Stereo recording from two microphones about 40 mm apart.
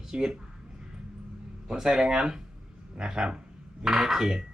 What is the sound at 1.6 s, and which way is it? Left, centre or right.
Speech, centre.